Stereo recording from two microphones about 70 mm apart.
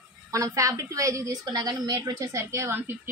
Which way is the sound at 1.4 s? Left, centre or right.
Right.